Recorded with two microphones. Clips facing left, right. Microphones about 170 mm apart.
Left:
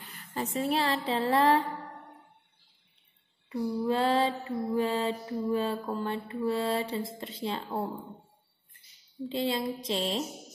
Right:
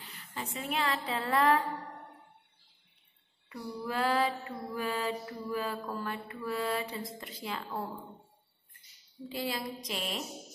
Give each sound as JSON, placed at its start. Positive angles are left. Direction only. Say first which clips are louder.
{"t": 0.3, "sound": "a woman's voice", "louder": "left 7 dB", "side_deg": 40}
{"t": 3.4, "sound": "mantra", "louder": "left 9 dB", "side_deg": 25}
{"t": 9.3, "sound": "mantra", "louder": "left 6 dB", "side_deg": 25}